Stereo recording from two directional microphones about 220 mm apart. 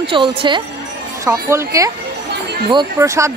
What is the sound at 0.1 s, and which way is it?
Speech, 25° right (ahead or behind).